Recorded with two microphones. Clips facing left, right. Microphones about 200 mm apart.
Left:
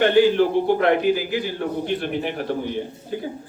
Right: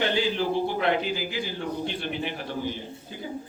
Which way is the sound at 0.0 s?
55° left (ahead or behind).